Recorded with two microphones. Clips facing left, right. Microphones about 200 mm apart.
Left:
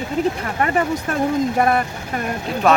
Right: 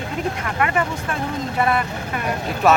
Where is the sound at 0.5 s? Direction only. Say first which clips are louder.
Even; 35° left (ahead or behind).